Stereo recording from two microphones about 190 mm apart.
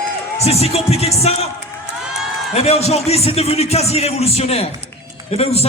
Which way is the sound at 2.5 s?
35° left (ahead or behind).